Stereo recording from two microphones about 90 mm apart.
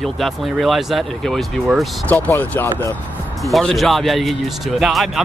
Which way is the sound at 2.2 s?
20° left (ahead or behind).